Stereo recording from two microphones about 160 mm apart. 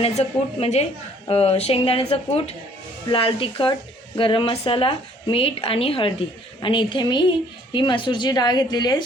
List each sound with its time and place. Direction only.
0.0 s a woman's voice: 40° left (ahead or behind); by 9.0 s 25° left (ahead or behind)